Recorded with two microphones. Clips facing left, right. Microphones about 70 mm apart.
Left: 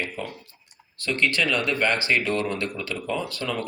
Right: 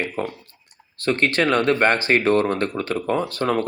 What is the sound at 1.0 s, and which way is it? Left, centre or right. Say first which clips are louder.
Speech: right 4 dB; right.